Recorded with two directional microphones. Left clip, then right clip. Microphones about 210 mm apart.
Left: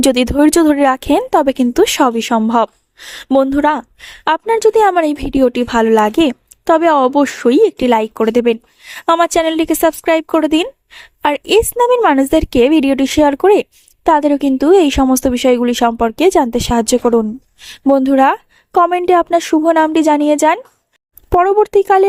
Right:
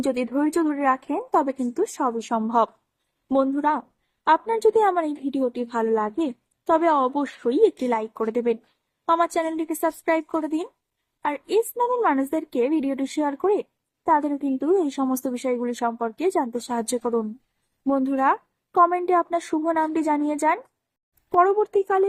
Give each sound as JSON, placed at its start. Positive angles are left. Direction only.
{"t": 0.0, "sound": "a woman's voice", "side_deg": 50}